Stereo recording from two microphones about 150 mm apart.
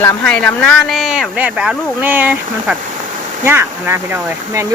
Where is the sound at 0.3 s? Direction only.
5° left (ahead or behind).